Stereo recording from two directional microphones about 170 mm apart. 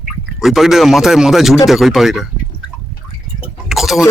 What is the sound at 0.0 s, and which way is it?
Speech, centre (ahead or behind).